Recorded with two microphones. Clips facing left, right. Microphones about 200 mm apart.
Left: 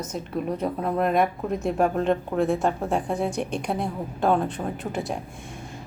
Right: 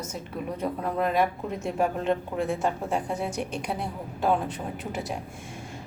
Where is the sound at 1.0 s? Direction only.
60° left (ahead or behind).